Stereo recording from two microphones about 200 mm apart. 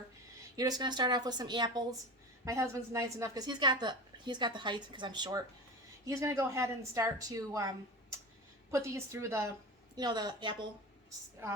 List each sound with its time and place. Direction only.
0.5 s a woman's voice: 20° right (ahead or behind)
8.7 s a woman's voice: 15° right (ahead or behind)